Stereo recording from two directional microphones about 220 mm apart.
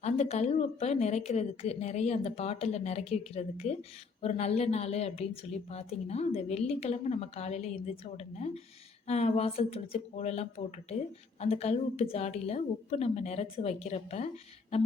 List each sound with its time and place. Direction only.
0.0 s speech: 30° left (ahead or behind)